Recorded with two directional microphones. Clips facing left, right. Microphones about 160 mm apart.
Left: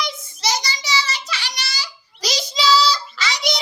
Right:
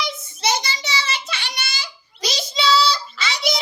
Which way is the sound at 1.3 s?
55° right (ahead or behind).